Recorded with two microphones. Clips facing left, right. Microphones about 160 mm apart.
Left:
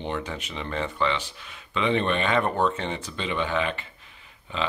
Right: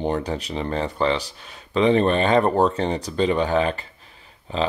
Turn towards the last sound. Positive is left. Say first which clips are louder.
# right 6 dB
turn(degrees=-35)  # may be behind; listen again after turning